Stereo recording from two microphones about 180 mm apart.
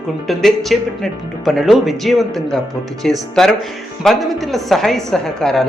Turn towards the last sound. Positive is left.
turn(degrees=0)  # may be behind; listen again after turning